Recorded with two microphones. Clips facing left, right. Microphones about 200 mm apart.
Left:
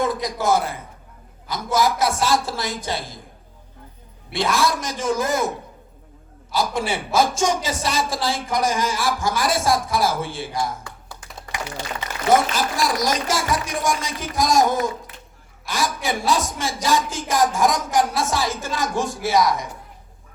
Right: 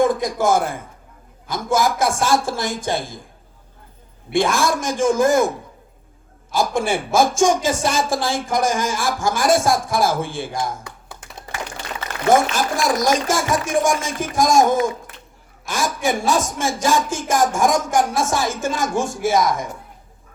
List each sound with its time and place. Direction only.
0.0 s a man's voice: 50° right (ahead or behind)
4.3 s a man's voice: 50° right (ahead or behind)
6.5 s a man's voice: 50° right (ahead or behind)
10.8 s computer keyboard: 20° right (ahead or behind)
12.3 s a man's voice: 50° right (ahead or behind)